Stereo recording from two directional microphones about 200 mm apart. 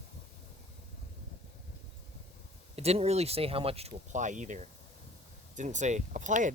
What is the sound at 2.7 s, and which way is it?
Speech, 30° right (ahead or behind).